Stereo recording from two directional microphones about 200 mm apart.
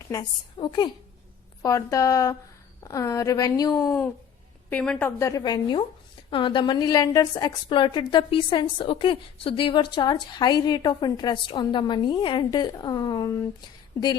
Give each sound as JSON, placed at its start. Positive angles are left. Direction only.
{"t": 0.1, "sound": "a woman's voice", "side_deg": 20}